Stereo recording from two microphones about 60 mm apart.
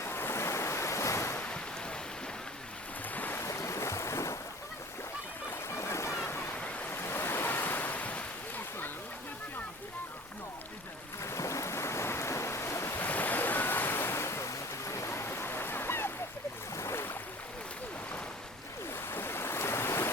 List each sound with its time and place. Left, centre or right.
0.0 s waves: left
3.2 s boat: left
3.4 s boat: left
5.5 s a sound: left
6.6 s waves: left
6.9 s waves: left
11.2 s waves: left
13.0 s waves: left
16.7 s a sound: left
19.1 s waves: left